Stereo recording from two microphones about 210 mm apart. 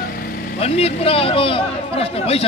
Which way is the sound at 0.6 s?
30° left (ahead or behind).